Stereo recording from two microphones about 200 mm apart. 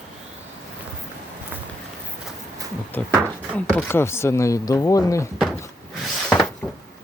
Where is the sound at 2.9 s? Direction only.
10° left (ahead or behind).